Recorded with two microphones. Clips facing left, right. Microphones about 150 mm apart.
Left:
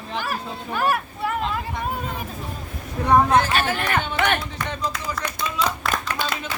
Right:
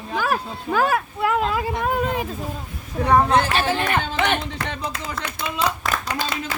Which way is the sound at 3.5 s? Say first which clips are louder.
Right 1 dB; 25° right (ahead or behind).